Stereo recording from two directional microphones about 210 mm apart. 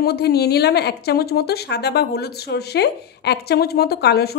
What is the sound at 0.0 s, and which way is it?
A woman's voice, 50° left (ahead or behind).